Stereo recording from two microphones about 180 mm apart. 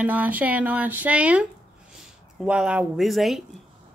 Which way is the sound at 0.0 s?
10° right (ahead or behind).